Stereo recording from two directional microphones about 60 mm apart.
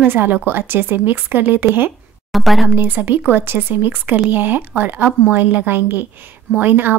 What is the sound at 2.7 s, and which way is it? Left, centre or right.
A woman's voice, right.